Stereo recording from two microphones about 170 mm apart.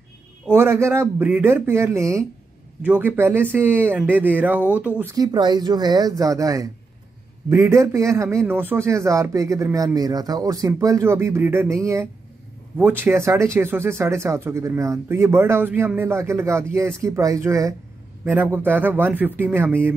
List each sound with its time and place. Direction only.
0.5 s speech: 15° right (ahead or behind)
5.1 s speech: 25° right (ahead or behind)